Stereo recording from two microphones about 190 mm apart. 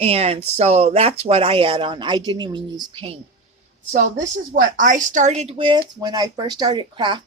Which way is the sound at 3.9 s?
45° right (ahead or behind).